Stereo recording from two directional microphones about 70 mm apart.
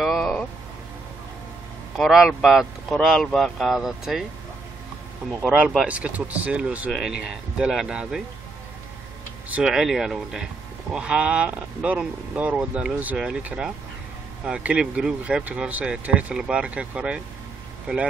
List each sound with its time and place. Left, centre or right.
0.0 s a sound: centre
2.0 s speech: centre
5.4 s speech: centre
5.9 s speech: right
6.9 s speech: centre
9.6 s speech: centre